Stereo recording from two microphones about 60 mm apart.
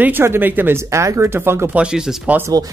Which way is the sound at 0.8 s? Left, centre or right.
Right.